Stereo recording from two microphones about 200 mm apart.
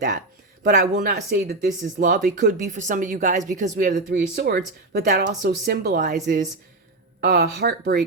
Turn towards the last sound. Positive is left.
turn(degrees=-50)  # may be behind; listen again after turning